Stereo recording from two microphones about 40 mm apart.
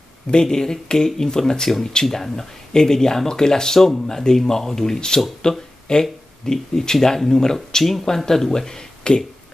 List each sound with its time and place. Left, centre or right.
0.3 s speech: centre